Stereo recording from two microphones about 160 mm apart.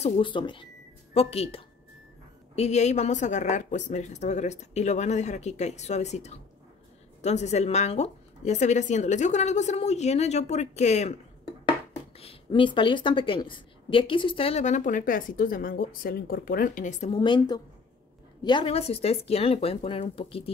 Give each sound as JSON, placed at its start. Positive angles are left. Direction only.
{"t": 0.0, "sound": "speech", "side_deg": 30}
{"t": 17.2, "sound": "a woman's voice", "side_deg": 30}